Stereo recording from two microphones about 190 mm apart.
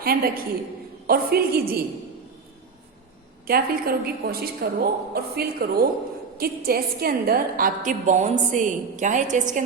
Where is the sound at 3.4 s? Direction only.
50° right (ahead or behind).